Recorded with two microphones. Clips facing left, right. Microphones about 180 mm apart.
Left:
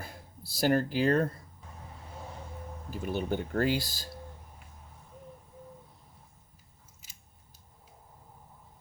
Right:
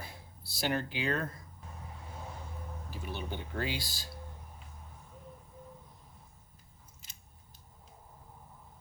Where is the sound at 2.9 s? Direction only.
45° left (ahead or behind).